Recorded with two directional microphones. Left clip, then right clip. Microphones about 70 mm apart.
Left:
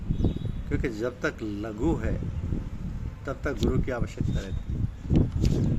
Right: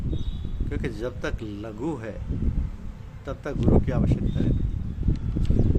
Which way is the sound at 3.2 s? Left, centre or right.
Right.